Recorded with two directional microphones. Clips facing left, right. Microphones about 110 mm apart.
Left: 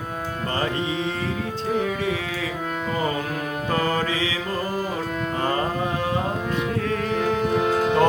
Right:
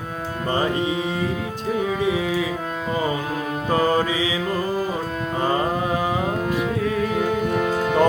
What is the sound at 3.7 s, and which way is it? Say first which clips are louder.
Music: right 4 dB; 15° right (ahead or behind).